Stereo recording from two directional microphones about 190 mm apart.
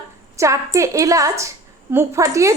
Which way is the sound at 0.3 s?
15° right (ahead or behind).